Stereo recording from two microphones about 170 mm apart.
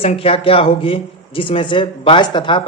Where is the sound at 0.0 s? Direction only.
35° left (ahead or behind).